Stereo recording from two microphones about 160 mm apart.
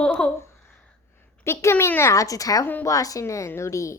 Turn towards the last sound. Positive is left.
turn(degrees=20)  # may be behind; listen again after turning